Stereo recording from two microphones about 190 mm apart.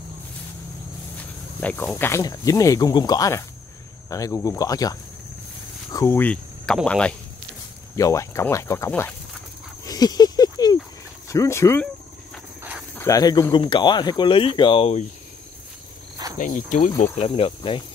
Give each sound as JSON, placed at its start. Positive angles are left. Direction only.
{"t": 1.6, "sound": "speech", "side_deg": 10}
{"t": 7.9, "sound": "speech", "side_deg": 15}
{"t": 9.8, "sound": "a sound", "side_deg": 20}
{"t": 11.2, "sound": "speech", "side_deg": 15}
{"t": 12.9, "sound": "speech", "side_deg": 15}
{"t": 16.3, "sound": "speech", "side_deg": 45}